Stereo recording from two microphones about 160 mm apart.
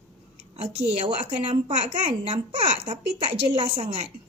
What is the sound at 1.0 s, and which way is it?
Speech, 35° right (ahead or behind).